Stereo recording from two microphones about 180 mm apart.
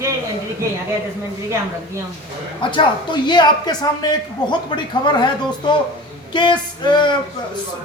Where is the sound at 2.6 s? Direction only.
25° left (ahead or behind).